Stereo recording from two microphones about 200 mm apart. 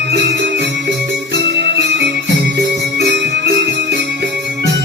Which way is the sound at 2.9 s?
55° right (ahead or behind).